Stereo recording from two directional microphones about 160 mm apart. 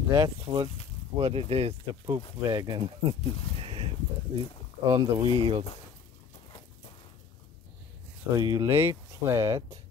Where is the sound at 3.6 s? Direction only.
35° right (ahead or behind).